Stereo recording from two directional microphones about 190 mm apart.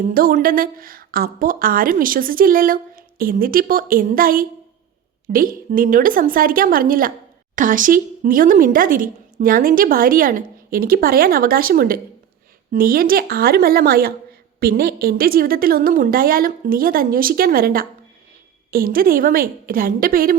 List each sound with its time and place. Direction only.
0.0 s a woman's voice: 50° right (ahead or behind)